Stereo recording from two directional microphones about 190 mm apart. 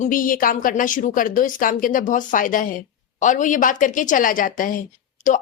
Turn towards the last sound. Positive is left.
turn(degrees=45)  # may be behind; listen again after turning